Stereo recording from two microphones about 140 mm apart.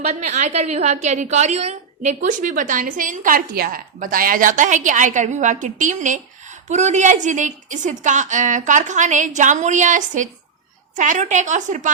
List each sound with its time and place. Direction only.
0.0 s a woman's voice: 55° right (ahead or behind)